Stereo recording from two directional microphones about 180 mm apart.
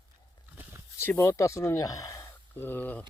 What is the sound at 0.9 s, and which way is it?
Speech, 15° left (ahead or behind).